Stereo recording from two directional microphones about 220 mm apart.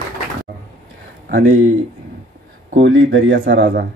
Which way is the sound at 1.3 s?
55° right (ahead or behind).